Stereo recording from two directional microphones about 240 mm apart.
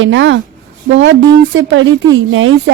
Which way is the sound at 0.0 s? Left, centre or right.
Right.